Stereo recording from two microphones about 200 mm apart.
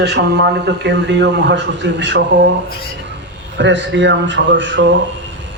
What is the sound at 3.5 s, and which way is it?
A man's voice, 65° right (ahead or behind).